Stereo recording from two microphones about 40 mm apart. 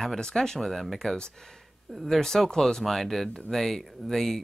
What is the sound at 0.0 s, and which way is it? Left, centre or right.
Speech, centre.